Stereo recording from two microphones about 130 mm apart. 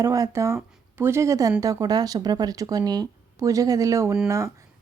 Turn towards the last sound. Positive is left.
turn(degrees=-25)  # may be behind; listen again after turning